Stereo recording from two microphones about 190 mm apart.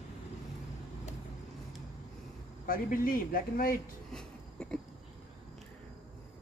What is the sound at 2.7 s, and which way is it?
Speech, 45° left (ahead or behind).